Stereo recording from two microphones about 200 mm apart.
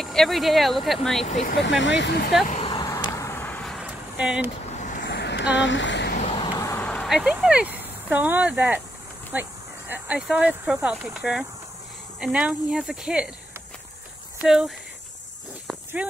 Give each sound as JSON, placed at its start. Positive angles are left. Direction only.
{"t": 0.0, "sound": "speech", "side_deg": 0}
{"t": 1.2, "sound": "speech", "side_deg": 35}
{"t": 1.6, "sound": "speech", "side_deg": 65}
{"t": 2.4, "sound": "a sound", "side_deg": 35}
{"t": 2.7, "sound": "vehicle", "side_deg": 20}
{"t": 4.6, "sound": "a sound", "side_deg": 35}
{"t": 5.0, "sound": "a sound", "side_deg": 55}
{"t": 6.2, "sound": "vehicle", "side_deg": 25}
{"t": 6.6, "sound": "speech", "side_deg": 10}
{"t": 14.4, "sound": "speech", "side_deg": -5}
{"t": 16.0, "sound": "speech", "side_deg": -5}